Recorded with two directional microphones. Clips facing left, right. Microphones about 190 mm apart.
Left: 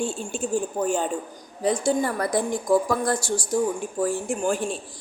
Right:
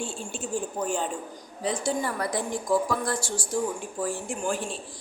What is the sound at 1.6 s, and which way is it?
A woman's voice, 45° left (ahead or behind).